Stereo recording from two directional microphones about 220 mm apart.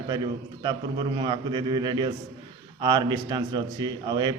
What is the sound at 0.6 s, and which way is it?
A man's voice, 20° right (ahead or behind).